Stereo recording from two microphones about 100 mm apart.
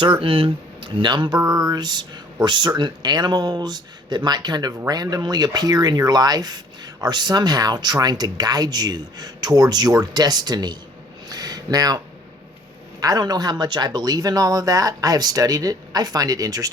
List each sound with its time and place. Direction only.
0.0 s speech: 60° right (ahead or behind); by 10.8 s 45° right (ahead or behind)
11.3 s a sound: 40° right (ahead or behind)
13.0 s speech: 40° right (ahead or behind)